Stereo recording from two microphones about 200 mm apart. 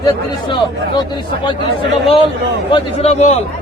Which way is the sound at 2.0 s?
25° left (ahead or behind).